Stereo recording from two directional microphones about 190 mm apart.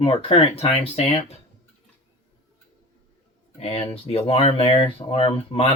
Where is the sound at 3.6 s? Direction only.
30° left (ahead or behind).